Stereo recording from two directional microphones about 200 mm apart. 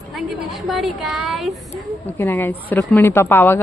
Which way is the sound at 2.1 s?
10° left (ahead or behind).